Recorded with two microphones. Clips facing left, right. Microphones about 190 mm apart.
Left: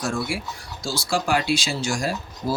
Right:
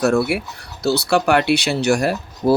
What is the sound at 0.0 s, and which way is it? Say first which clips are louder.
Speech: right 9 dB; 65° right (ahead or behind).